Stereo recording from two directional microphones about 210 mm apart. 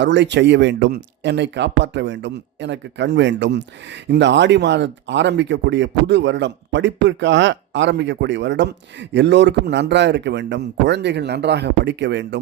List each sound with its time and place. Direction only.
0.0 s speech: 55° right (ahead or behind)